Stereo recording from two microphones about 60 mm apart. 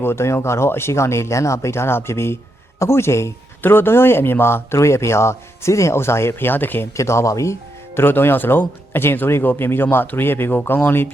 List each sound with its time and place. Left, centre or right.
0.0 s speech: left
3.6 s speech: left
6.9 s speech: left
7.9 s speech: left